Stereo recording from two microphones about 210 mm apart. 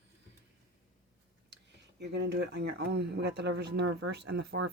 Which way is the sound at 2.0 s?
55° right (ahead or behind).